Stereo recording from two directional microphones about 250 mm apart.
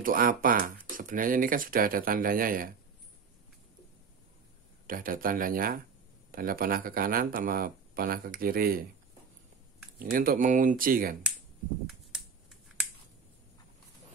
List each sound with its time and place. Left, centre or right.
0.0 s speech: right
4.8 s speech: right
9.9 s speech: right
11.8 s a sound: centre